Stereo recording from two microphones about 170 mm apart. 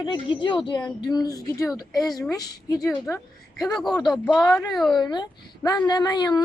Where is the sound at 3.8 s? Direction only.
25° left (ahead or behind).